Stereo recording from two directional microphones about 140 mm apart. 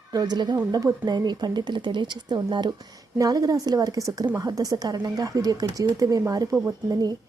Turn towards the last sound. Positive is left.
turn(degrees=-25)  # may be behind; listen again after turning